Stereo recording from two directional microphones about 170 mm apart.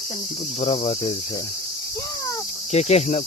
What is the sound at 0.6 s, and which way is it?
Cricket, 35° left (ahead or behind).